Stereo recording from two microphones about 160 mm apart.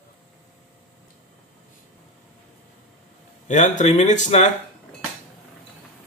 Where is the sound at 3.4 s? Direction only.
50° left (ahead or behind).